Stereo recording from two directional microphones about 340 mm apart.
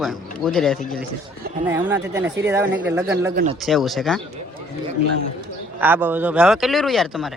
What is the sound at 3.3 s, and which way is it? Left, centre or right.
Speech, right.